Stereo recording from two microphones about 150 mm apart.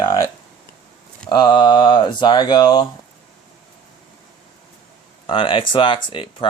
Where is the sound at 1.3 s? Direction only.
30° left (ahead or behind).